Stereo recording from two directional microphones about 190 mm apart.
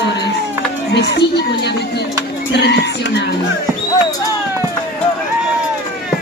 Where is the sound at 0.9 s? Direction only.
60° left (ahead or behind).